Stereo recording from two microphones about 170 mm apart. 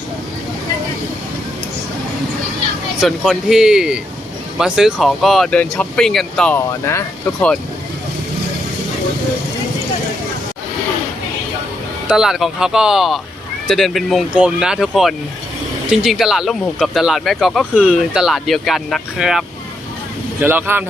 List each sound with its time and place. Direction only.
3.0 s speech: centre (ahead or behind)
6.7 s speech: 15° left (ahead or behind)
12.0 s speech: 5° right (ahead or behind)